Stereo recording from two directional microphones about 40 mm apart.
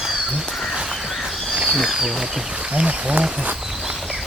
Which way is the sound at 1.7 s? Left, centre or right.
Centre.